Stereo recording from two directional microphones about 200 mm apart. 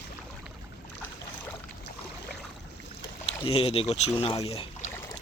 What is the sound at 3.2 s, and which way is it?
Speech, 30° left (ahead or behind).